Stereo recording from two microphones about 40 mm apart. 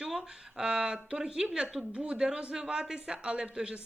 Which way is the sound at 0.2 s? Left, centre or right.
Centre.